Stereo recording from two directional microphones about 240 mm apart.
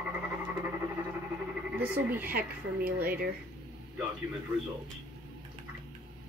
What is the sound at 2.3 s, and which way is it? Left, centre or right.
Speech, right.